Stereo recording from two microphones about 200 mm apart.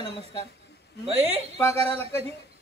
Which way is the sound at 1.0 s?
30° right (ahead or behind).